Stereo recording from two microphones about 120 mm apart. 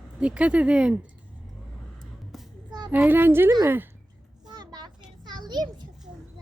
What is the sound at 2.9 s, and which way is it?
A woman's voice, 15° right (ahead or behind).